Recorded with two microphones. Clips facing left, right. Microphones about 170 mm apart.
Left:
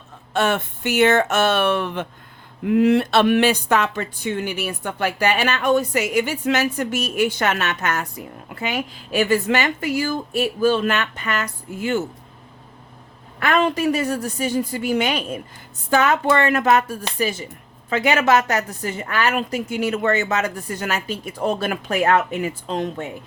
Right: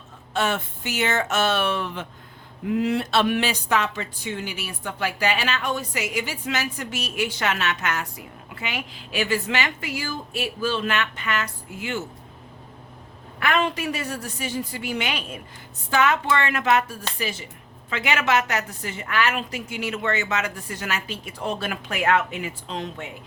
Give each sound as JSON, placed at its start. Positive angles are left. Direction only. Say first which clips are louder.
{"t": 0.3, "sound": "a woman's voice", "louder": "left 4 dB", "side_deg": 60}
{"t": 13.4, "sound": "a woman's voice", "louder": "left 5 dB", "side_deg": 45}